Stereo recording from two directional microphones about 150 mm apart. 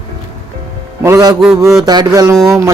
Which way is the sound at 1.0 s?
20° right (ahead or behind).